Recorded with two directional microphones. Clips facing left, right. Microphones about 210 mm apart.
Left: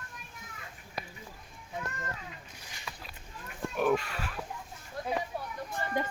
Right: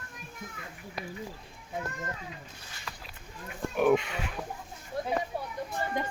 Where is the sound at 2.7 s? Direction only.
15° left (ahead or behind).